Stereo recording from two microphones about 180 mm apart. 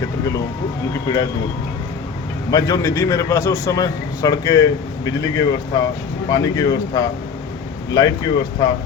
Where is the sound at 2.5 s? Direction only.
20° left (ahead or behind).